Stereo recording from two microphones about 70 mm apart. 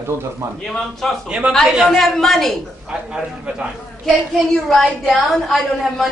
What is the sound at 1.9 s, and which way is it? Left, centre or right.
Speech, centre.